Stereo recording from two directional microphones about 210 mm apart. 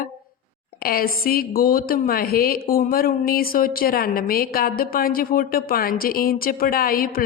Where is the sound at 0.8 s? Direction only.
45° left (ahead or behind).